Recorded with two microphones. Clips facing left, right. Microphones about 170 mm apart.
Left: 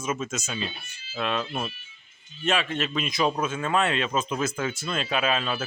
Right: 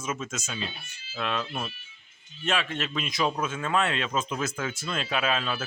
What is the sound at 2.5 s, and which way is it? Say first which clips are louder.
Speech: left 3 dB; 5° left (ahead or behind).